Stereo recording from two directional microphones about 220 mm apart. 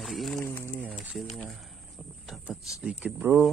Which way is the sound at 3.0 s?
10° right (ahead or behind).